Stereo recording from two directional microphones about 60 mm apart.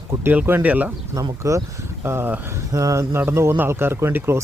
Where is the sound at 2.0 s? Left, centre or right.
Right.